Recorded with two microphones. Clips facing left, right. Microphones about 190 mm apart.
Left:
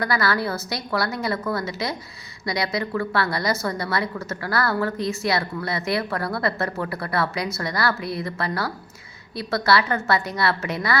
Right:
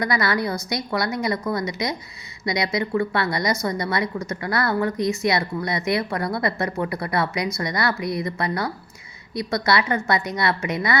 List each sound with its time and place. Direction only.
0.0 s a woman's voice: 20° right (ahead or behind)